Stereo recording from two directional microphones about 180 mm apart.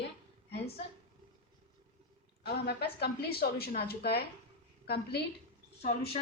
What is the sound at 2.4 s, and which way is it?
A woman's voice, 65° left (ahead or behind).